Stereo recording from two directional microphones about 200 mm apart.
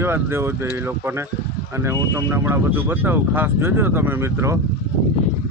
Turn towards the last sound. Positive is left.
turn(degrees=-10)  # may be behind; listen again after turning